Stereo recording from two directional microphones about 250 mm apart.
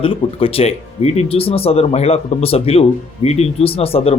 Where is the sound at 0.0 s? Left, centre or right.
Left.